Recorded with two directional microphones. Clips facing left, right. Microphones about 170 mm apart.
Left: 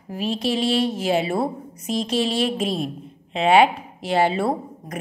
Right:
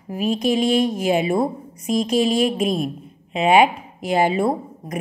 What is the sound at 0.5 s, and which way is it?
Speech, 15° right (ahead or behind).